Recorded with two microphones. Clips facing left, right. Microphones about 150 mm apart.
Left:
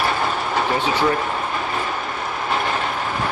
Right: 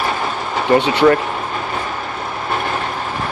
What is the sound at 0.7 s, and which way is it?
Speech, 70° right (ahead or behind).